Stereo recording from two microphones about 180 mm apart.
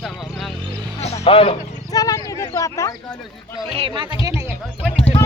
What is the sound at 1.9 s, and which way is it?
Speech, 20° left (ahead or behind).